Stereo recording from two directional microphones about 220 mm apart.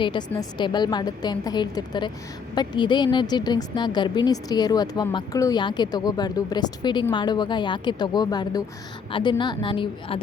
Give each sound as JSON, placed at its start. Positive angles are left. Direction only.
{"t": 0.0, "sound": "a woman's voice", "side_deg": 20}